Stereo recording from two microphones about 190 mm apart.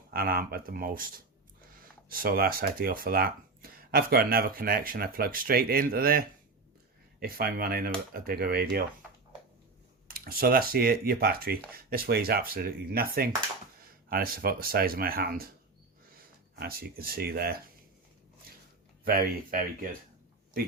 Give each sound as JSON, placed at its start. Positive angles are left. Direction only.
{"t": 0.1, "sound": "speech", "side_deg": -50}
{"t": 10.1, "sound": "speech", "side_deg": -50}
{"t": 16.6, "sound": "speech", "side_deg": -55}
{"t": 19.0, "sound": "speech", "side_deg": -50}